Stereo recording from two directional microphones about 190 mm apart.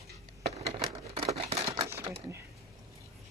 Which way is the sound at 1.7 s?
15° right (ahead or behind).